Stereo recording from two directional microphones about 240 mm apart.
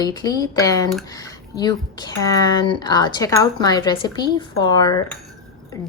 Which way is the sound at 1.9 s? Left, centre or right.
Centre.